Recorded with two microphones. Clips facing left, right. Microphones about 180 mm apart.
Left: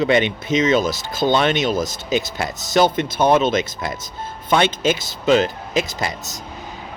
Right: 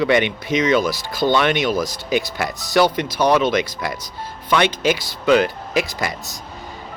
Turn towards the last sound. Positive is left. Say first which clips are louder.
# even
turn(degrees=20)  # may be behind; listen again after turning